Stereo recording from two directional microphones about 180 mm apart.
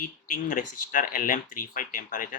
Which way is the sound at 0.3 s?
45° left (ahead or behind).